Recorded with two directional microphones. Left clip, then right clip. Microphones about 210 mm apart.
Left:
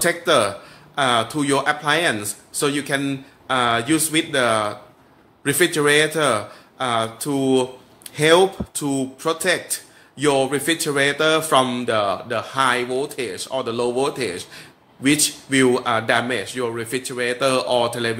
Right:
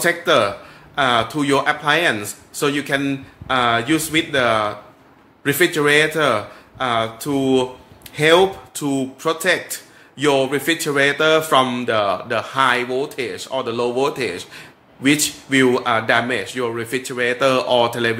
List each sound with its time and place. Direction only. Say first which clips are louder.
0.0 s speech: right 2 dB; 5° left (ahead or behind)